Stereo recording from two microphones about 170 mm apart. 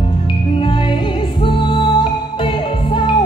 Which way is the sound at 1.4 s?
30° left (ahead or behind).